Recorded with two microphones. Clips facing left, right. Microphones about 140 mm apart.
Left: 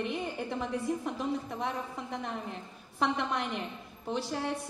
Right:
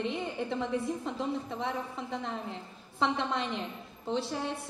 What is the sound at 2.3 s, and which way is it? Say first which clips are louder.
A woman's voice: even; 20° right (ahead or behind).